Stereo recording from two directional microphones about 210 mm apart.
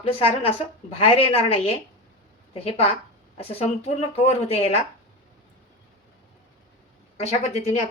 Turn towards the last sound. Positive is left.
turn(degrees=30)  # may be behind; listen again after turning